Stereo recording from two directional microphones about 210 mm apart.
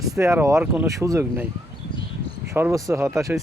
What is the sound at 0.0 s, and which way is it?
Speech, 15° right (ahead or behind).